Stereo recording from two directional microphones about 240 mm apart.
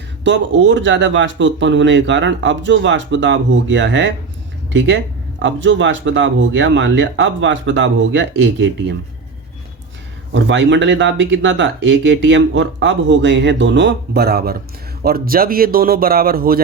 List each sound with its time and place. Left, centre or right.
0.3 s speech: right
10.3 s speech: right